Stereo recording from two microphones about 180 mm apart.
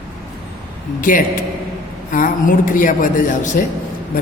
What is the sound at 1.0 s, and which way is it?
A man's voice, 45° left (ahead or behind).